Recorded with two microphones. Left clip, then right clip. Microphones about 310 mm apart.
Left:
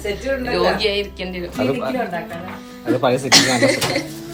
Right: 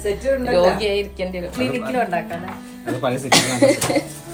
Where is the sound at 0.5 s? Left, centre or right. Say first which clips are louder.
Even; centre.